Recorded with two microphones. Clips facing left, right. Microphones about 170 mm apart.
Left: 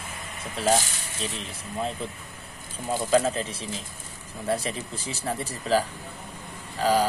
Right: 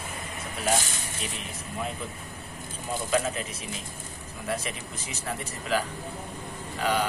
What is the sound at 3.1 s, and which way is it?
Speech, 30° left (ahead or behind).